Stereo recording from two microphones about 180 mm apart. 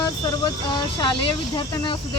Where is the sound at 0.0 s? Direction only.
25° left (ahead or behind).